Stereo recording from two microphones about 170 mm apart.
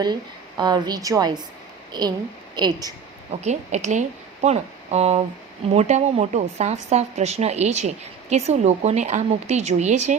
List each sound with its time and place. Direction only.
0.0 s a woman's voice: 25° right (ahead or behind)
3.4 s a woman's voice: 45° right (ahead or behind)